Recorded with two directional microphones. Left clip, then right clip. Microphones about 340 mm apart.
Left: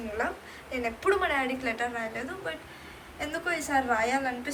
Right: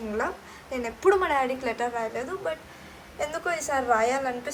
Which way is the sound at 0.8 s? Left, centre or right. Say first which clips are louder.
Right 4 dB; right.